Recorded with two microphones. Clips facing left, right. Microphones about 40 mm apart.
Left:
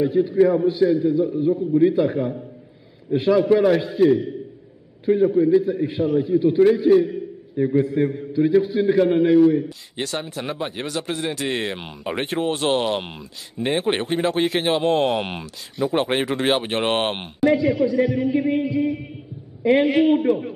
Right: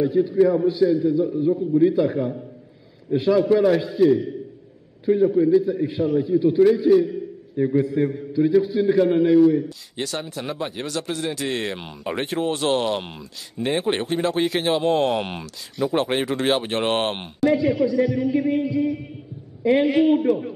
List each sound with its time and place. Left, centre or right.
0.0 s a man's voice: centre
17.6 s speech: centre
17.8 s a man's voice: centre
19.9 s a man's voice: centre